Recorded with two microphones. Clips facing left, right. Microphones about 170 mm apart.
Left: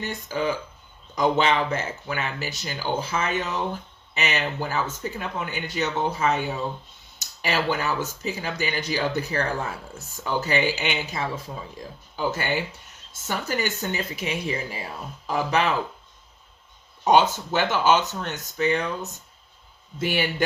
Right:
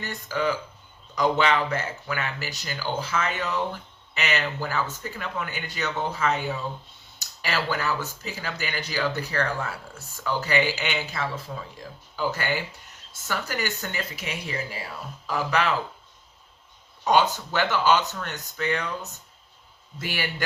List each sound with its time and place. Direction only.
0.0 s speech: 20° left (ahead or behind)
7.4 s speech: 20° left (ahead or behind)
17.0 s speech: 20° left (ahead or behind)
20.0 s speech: 20° left (ahead or behind)